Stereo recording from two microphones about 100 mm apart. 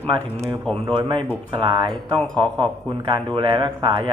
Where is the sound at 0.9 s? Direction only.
55° right (ahead or behind).